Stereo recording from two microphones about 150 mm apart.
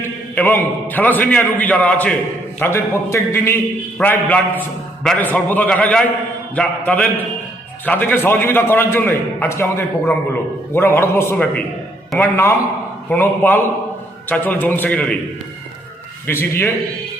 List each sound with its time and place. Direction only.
0.0 s a man's voice: 15° left (ahead or behind)
12.1 s a man's voice: centre (ahead or behind)
13.1 s a man's voice: 10° left (ahead or behind)
16.2 s a man's voice: 15° left (ahead or behind)